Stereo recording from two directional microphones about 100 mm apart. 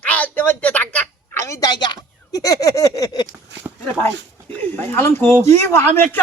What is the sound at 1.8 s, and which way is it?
Speech, 45° left (ahead or behind).